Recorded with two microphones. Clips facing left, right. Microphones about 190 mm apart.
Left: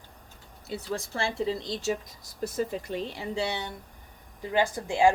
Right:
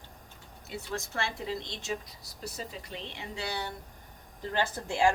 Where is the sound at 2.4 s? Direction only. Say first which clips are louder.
Left 10 dB; 50° left (ahead or behind); by 3.7 s 25° left (ahead or behind).